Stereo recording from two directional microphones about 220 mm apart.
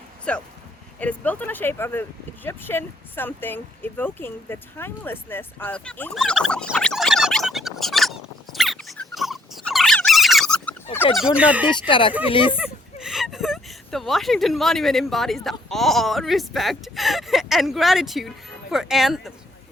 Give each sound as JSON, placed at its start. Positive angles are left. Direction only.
{"t": 0.3, "sound": "speech", "side_deg": 5}
{"t": 11.7, "sound": "speech", "side_deg": 20}
{"t": 12.5, "sound": "a sound", "side_deg": -5}
{"t": 15.7, "sound": "speech", "side_deg": 0}